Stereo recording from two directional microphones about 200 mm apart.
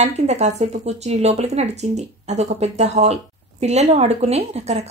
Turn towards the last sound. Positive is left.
turn(degrees=-30)  # may be behind; listen again after turning